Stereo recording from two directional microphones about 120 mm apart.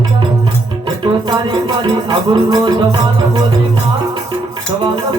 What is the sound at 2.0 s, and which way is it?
Music, 30° right (ahead or behind).